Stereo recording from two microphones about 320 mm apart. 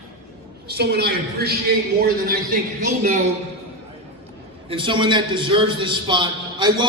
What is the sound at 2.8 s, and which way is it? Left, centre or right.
Speech, right.